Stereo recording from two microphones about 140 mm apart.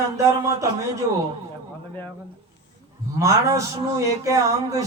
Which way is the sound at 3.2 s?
20° right (ahead or behind).